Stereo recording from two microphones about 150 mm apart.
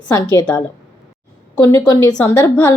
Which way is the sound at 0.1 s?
25° left (ahead or behind).